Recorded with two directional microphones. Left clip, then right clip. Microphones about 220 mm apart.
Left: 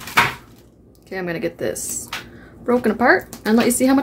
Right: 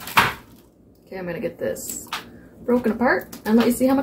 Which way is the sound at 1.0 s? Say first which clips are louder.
Left 4 dB; 40° left (ahead or behind).